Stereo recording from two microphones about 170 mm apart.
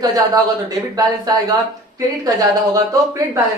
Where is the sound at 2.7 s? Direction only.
20° right (ahead or behind).